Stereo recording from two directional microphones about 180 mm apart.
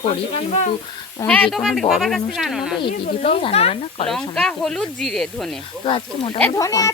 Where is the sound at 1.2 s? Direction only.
5° left (ahead or behind).